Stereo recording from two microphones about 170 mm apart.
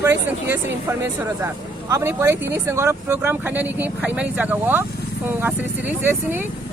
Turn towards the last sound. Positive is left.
turn(degrees=-10)  # may be behind; listen again after turning